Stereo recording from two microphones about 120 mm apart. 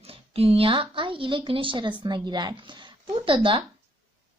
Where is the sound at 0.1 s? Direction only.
55° right (ahead or behind).